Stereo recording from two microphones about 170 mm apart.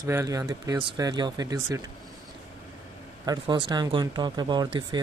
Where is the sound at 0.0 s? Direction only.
20° right (ahead or behind).